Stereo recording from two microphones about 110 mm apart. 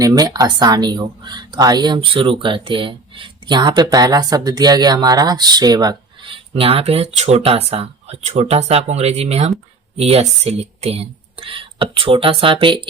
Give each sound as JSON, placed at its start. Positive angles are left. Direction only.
{"t": 0.0, "sound": "speech", "side_deg": -35}
{"t": 6.3, "sound": "speech", "side_deg": -60}